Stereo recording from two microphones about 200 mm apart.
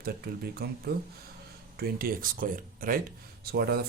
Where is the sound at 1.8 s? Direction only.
45° right (ahead or behind).